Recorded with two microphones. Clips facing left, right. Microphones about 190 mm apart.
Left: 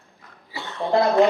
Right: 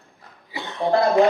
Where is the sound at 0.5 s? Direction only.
15° right (ahead or behind).